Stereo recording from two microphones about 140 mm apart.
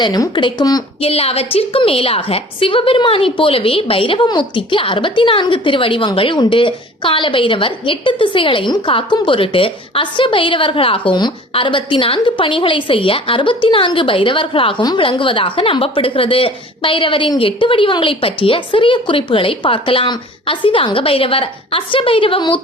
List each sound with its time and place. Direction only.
0.0 s speech: 30° left (ahead or behind)
1.0 s a woman's voice: 45° left (ahead or behind)